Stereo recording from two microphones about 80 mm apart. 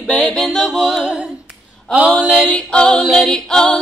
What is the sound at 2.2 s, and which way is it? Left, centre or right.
Music, centre.